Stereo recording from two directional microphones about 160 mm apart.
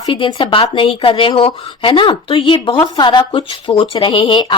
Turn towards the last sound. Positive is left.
turn(degrees=30)  # may be behind; listen again after turning